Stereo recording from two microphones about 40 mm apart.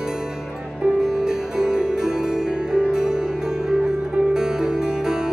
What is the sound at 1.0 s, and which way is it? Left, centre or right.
Music, centre.